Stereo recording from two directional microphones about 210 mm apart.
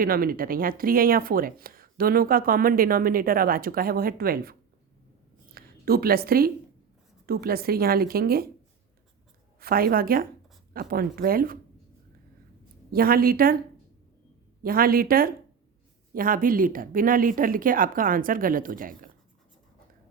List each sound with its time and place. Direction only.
0.0 s speech: 45° right (ahead or behind)
5.5 s speech: 45° right (ahead or behind)
9.6 s speech: 45° right (ahead or behind)
12.9 s speech: 45° right (ahead or behind)
14.6 s speech: 45° right (ahead or behind)